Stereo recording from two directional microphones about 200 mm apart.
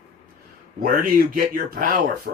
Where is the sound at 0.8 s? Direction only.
45° right (ahead or behind).